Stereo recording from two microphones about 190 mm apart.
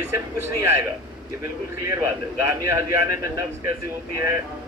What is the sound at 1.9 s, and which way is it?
Speech, 15° right (ahead or behind).